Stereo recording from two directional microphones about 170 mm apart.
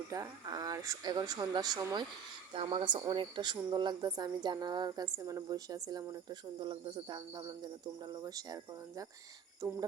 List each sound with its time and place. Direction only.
0.1 s speech: 20° right (ahead or behind)
9.6 s speech: 25° right (ahead or behind)